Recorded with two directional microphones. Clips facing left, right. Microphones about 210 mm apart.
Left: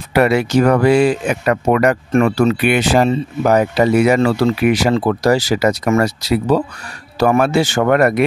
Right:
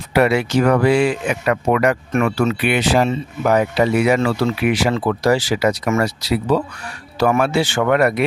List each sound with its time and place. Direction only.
0.1 s speech: 45° left (ahead or behind)
2.6 s speech: 50° left (ahead or behind)